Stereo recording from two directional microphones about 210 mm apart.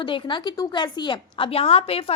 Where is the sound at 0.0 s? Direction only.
25° left (ahead or behind).